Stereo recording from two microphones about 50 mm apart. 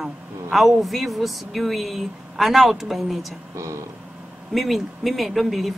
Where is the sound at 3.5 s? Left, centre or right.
Right.